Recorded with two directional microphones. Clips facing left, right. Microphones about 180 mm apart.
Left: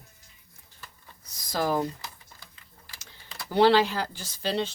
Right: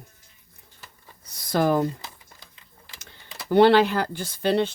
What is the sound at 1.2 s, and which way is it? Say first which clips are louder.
Speech: right 6 dB; 60° right (ahead or behind).